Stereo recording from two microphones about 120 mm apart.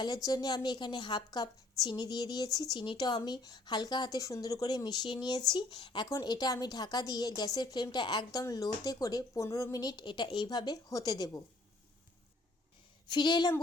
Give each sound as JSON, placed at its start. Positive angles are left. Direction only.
{"t": 0.0, "sound": "a woman's voice", "side_deg": 35}
{"t": 13.1, "sound": "a woman's voice", "side_deg": 40}